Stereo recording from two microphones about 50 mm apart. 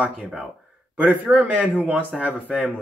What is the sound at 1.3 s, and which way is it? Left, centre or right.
Speech, right.